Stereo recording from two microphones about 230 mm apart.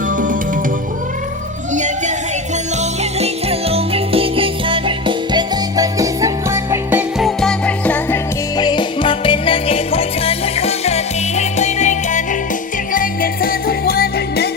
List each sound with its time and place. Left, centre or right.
1.7 s music: right; by 7.0 s centre
7.2 s music: centre; by 14.5 s left